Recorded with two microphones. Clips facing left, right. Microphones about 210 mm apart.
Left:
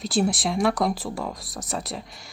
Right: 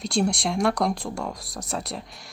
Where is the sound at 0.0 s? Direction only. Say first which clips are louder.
Left 1 dB; centre (ahead or behind).